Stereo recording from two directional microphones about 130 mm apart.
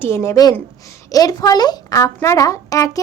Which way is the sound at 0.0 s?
20° left (ahead or behind).